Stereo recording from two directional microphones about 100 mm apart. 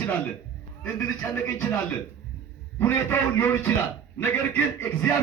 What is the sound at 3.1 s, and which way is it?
A man's voice, 20° left (ahead or behind).